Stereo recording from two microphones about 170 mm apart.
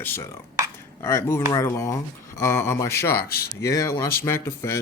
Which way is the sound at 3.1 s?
65° left (ahead or behind).